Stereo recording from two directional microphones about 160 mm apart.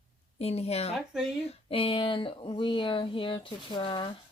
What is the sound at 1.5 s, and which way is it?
Speech, 35° left (ahead or behind).